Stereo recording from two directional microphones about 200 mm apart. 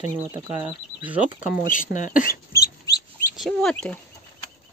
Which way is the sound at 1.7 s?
40° left (ahead or behind).